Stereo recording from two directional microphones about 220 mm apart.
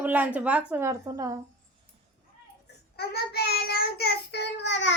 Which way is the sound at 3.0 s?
45° left (ahead or behind).